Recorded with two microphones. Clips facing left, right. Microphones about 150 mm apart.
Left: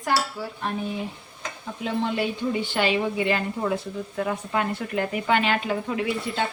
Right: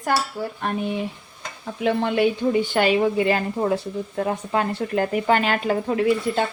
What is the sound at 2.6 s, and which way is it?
A woman's voice, 45° right (ahead or behind).